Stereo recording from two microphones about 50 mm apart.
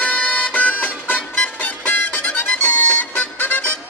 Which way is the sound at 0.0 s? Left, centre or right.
Left.